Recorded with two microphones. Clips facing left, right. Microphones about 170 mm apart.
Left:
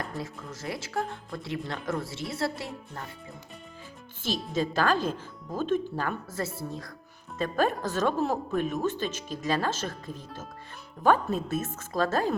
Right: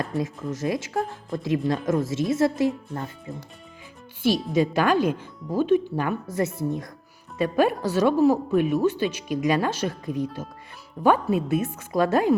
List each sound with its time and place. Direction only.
0.0 s speech: 20° right (ahead or behind)
4.2 s speech: 15° right (ahead or behind)